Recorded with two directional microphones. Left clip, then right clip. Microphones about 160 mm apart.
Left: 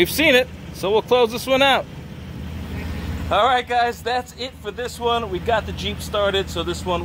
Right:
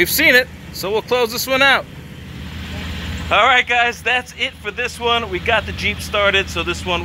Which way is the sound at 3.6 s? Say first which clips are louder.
Right 4 dB; 25° right (ahead or behind).